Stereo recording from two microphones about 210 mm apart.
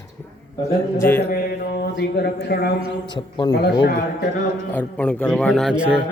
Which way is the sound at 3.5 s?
50° left (ahead or behind).